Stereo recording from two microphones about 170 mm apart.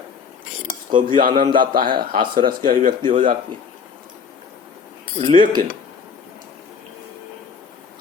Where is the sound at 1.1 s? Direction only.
55° right (ahead or behind).